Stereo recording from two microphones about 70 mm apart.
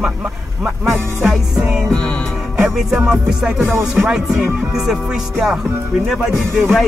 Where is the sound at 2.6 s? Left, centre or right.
Centre.